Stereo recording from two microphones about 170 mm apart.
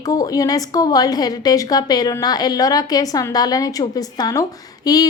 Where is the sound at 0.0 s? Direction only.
20° left (ahead or behind).